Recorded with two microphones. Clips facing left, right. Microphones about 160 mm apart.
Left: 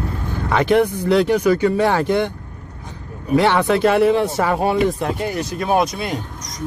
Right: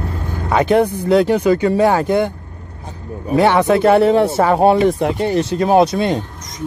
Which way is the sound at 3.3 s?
20° right (ahead or behind).